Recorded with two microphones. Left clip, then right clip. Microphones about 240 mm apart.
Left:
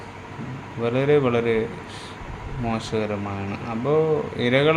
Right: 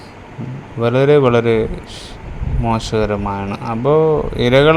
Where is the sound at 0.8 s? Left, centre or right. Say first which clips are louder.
Right 8 dB; right.